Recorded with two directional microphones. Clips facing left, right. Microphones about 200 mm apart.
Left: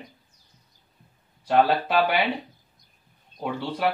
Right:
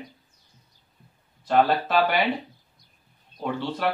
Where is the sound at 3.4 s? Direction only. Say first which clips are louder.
Even; 10° left (ahead or behind).